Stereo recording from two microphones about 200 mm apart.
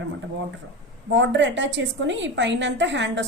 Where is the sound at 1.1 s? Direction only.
65° right (ahead or behind).